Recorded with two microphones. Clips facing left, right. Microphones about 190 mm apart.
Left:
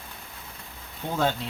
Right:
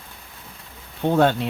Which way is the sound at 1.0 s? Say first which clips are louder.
Right 8 dB; 65° right (ahead or behind).